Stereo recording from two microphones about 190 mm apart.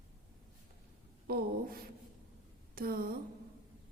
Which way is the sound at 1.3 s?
55° right (ahead or behind).